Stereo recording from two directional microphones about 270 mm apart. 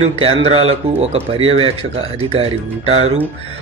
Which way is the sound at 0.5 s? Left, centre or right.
Right.